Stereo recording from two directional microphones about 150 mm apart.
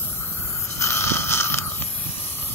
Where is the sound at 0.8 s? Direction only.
15° left (ahead or behind).